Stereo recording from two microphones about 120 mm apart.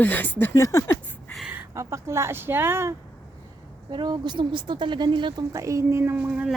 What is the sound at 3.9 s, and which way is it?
Speech, 35° right (ahead or behind).